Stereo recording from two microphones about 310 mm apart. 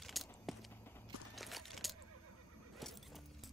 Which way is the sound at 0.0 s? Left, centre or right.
Centre.